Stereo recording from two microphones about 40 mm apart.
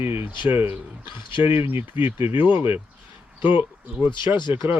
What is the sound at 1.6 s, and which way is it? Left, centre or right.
Speech, right.